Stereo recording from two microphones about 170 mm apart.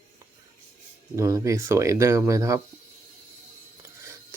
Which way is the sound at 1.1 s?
20° right (ahead or behind).